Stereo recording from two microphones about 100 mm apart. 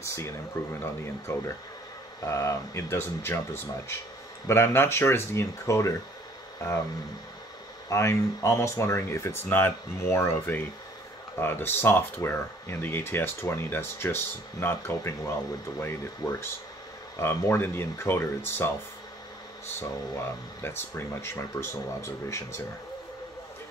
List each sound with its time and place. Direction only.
0.0 s speech: 30° left (ahead or behind)
7.9 s speech: 30° left (ahead or behind)
19.8 s speech: 25° left (ahead or behind)